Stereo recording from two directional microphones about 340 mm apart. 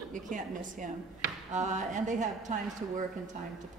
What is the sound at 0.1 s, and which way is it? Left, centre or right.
A woman's voice, right.